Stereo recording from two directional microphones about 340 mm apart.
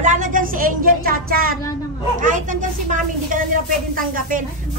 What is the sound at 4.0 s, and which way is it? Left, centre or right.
Speech, right.